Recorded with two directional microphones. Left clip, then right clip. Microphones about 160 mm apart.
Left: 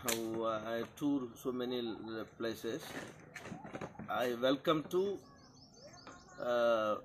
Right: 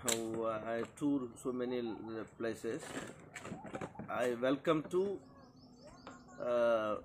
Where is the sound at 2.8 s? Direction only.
65° right (ahead or behind).